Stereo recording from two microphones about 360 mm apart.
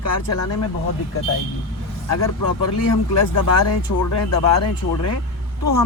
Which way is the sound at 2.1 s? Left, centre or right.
Left.